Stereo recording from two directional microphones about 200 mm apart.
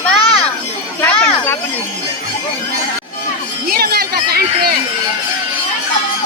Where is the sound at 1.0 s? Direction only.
10° left (ahead or behind).